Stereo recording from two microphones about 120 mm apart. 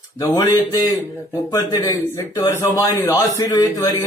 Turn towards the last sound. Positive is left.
turn(degrees=30)  # may be behind; listen again after turning